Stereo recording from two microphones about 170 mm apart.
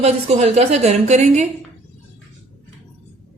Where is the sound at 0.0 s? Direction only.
40° right (ahead or behind).